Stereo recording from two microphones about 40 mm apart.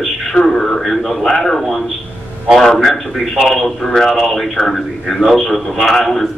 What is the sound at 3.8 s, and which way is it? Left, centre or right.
Speech, centre.